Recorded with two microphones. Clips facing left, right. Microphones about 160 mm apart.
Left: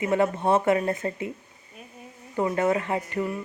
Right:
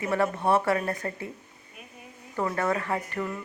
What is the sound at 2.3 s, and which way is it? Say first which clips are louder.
Speech: left 4 dB; 20° left (ahead or behind).